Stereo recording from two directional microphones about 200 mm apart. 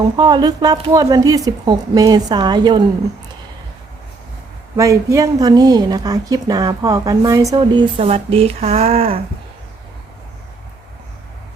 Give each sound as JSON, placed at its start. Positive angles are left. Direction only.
{"t": 0.2, "sound": "a woman's voice", "side_deg": -20}
{"t": 4.8, "sound": "a woman's voice", "side_deg": -15}